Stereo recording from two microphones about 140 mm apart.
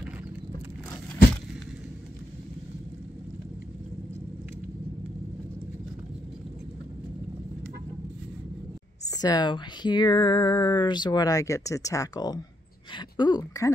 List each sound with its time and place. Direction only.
9.2 s speech: 30° left (ahead or behind)